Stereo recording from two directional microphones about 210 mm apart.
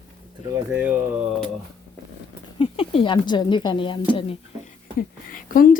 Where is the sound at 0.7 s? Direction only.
5° right (ahead or behind).